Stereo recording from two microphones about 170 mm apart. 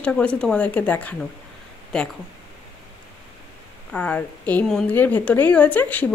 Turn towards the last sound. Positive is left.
turn(degrees=10)  # may be behind; listen again after turning